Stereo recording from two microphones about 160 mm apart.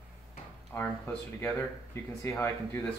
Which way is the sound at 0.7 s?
15° left (ahead or behind).